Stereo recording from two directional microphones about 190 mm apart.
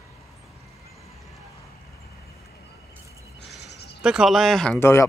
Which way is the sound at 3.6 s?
60° left (ahead or behind).